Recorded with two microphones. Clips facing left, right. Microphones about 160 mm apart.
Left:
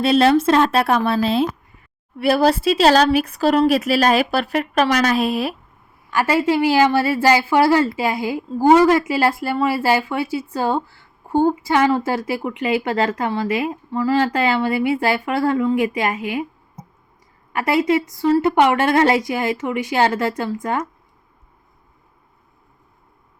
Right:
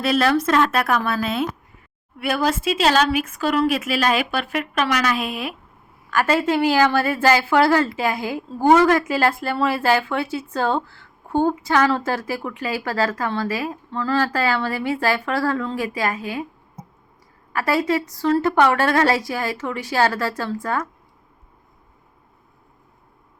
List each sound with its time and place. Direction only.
0.0 s speech: 25° left (ahead or behind)
6.7 s a woman's voice: 15° left (ahead or behind)
17.5 s a woman's voice: 20° left (ahead or behind)